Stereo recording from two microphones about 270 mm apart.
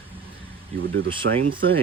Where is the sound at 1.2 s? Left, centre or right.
Right.